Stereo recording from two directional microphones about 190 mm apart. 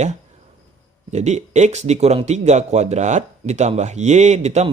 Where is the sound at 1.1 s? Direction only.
35° right (ahead or behind).